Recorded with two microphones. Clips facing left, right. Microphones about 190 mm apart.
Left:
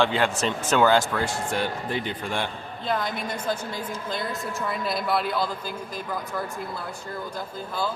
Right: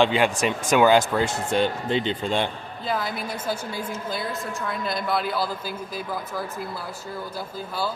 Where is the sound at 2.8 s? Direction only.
5° right (ahead or behind).